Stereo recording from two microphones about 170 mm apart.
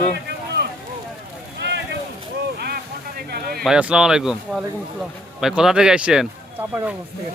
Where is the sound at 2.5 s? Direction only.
65° right (ahead or behind).